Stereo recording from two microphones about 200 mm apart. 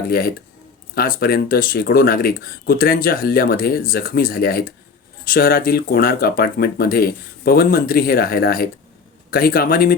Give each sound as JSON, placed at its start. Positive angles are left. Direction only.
{"t": 0.1, "sound": "speech", "side_deg": 50}